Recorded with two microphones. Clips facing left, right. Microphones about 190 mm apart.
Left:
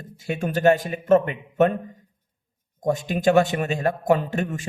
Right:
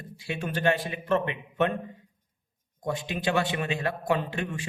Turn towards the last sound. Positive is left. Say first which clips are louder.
# left 5 dB
turn(degrees=45)  # may be behind; listen again after turning